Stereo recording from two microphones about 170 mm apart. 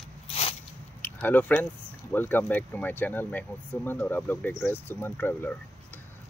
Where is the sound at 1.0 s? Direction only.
10° left (ahead or behind).